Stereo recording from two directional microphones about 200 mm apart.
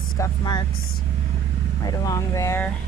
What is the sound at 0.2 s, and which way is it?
Speech, 20° left (ahead or behind).